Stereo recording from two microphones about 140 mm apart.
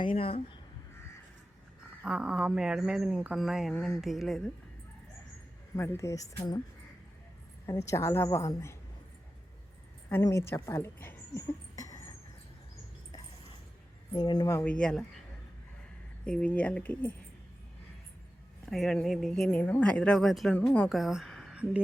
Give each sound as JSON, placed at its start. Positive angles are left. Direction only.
{"t": 0.2, "sound": "speech", "side_deg": 40}
{"t": 2.0, "sound": "speech", "side_deg": -5}
{"t": 5.7, "sound": "a woman's voice", "side_deg": 20}
{"t": 7.7, "sound": "a woman's voice", "side_deg": 20}
{"t": 10.1, "sound": "speech", "side_deg": 20}
{"t": 14.1, "sound": "a woman's voice", "side_deg": 30}
{"t": 16.2, "sound": "speech", "side_deg": 5}
{"t": 18.7, "sound": "speech", "side_deg": 5}
{"t": 21.0, "sound": "a sound", "side_deg": 0}